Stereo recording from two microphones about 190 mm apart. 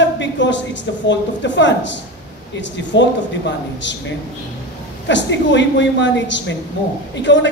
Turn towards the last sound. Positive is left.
turn(degrees=70)  # may be behind; listen again after turning